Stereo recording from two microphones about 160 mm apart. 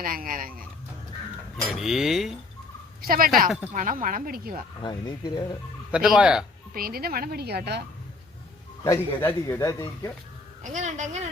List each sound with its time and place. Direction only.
0.0 s speech: 60° right (ahead or behind)
1.7 s speech: centre (ahead or behind)
3.0 s speech: 65° right (ahead or behind)
4.8 s speech: 25° left (ahead or behind)
5.9 s speech: 5° right (ahead or behind)
6.7 s a woman's voice: 70° right (ahead or behind); by 7.8 s 90° right
8.8 s speech: 20° left (ahead or behind)
10.6 s speech: 50° right (ahead or behind)